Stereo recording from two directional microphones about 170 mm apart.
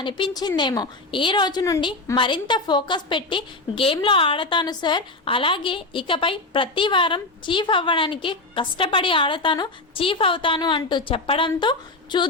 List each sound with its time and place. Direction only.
0.0 s a woman's voice: 25° left (ahead or behind)